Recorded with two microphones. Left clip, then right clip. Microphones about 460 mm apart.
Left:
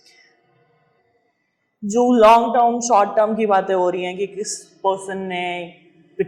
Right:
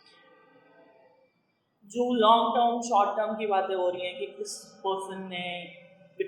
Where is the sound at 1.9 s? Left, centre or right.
Left.